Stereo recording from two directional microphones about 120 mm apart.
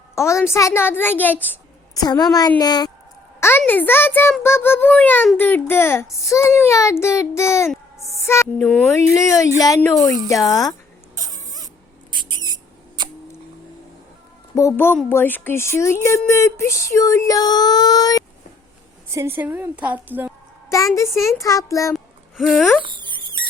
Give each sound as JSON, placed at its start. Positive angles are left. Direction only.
{"t": 0.2, "sound": "speech", "side_deg": 25}
{"t": 2.0, "sound": "a woman's voice", "side_deg": 35}
{"t": 3.7, "sound": "a child's voice", "side_deg": 15}
{"t": 8.2, "sound": "a sound", "side_deg": 20}
{"t": 8.5, "sound": "a child's voice", "side_deg": 5}
{"t": 8.9, "sound": "speech", "side_deg": 25}
{"t": 11.1, "sound": "rodents", "side_deg": -30}
{"t": 14.5, "sound": "speech", "side_deg": 25}
{"t": 19.0, "sound": "a woman's voice", "side_deg": -20}
{"t": 21.2, "sound": "speech", "side_deg": 25}
{"t": 21.9, "sound": "a sound", "side_deg": 0}
{"t": 22.8, "sound": "speech", "side_deg": -45}